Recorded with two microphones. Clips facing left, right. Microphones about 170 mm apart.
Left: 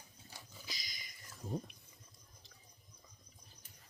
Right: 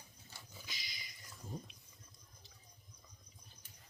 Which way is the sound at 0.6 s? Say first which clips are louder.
Left 2 dB; 40° left (ahead or behind).